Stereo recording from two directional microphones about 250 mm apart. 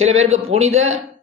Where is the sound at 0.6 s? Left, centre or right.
Right.